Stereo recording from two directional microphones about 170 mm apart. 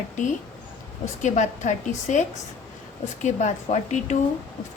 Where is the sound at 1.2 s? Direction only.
45° left (ahead or behind).